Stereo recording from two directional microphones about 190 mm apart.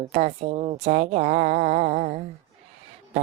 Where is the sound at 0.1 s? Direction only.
35° right (ahead or behind).